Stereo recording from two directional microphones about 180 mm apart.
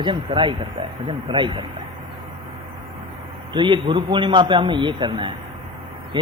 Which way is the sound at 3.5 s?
25° right (ahead or behind).